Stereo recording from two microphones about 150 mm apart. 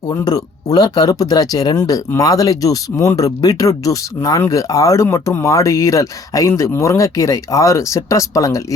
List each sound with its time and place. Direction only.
0.1 s speech: 25° left (ahead or behind)